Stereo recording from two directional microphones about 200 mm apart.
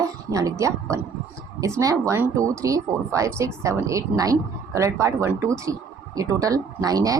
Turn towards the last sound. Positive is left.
turn(degrees=-15)  # may be behind; listen again after turning